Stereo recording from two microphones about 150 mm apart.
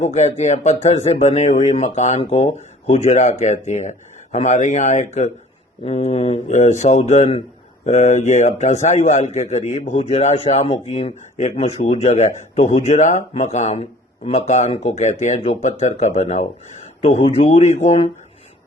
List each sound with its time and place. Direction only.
0.0 s a man's voice: 50° left (ahead or behind)